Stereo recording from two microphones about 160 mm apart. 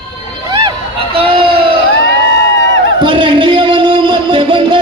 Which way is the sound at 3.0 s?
30° right (ahead or behind).